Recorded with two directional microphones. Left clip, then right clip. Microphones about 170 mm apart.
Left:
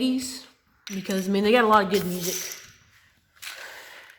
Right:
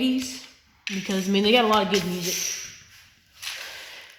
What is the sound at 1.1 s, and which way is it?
Speech, 5° left (ahead or behind).